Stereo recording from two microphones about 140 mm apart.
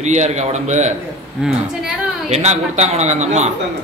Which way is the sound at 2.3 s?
50° right (ahead or behind).